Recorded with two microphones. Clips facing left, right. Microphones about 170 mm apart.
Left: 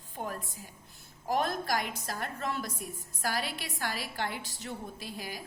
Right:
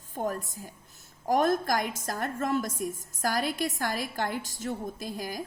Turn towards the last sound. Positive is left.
turn(degrees=-45)  # may be behind; listen again after turning